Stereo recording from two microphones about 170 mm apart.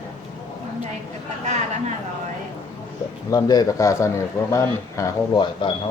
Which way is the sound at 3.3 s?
20° left (ahead or behind).